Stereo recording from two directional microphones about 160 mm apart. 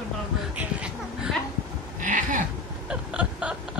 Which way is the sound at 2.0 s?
50° right (ahead or behind).